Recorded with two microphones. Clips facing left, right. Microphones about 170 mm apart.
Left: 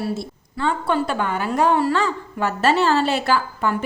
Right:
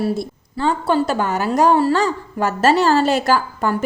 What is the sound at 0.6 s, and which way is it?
A woman's voice, 35° right (ahead or behind).